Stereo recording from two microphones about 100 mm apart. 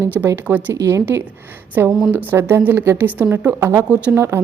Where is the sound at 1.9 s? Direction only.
Centre (ahead or behind).